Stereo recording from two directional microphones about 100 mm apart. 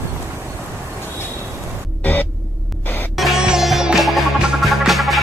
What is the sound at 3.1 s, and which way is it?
Music, 5° right (ahead or behind).